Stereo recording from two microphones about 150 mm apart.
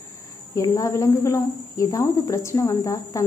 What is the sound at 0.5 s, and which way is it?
Speech, 20° left (ahead or behind).